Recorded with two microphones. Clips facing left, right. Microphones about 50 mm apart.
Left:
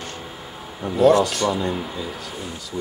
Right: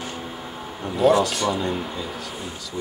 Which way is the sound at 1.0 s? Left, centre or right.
Centre.